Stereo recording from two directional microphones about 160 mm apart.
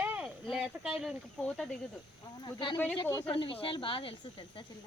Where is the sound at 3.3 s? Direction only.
35° left (ahead or behind).